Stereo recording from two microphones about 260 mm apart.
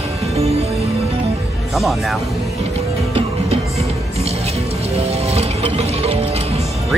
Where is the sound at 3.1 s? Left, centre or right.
Right.